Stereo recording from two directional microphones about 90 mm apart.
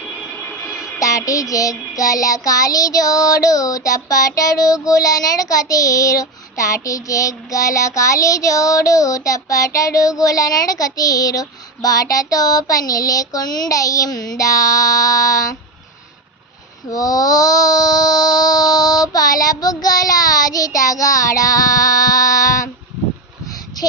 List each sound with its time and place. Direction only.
0.3 s music: 5° left (ahead or behind)
0.7 s child singing: 40° left (ahead or behind)
16.9 s a sound: 40° left (ahead or behind)